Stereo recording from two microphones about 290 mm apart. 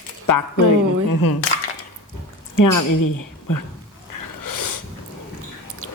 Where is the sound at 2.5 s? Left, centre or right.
Left.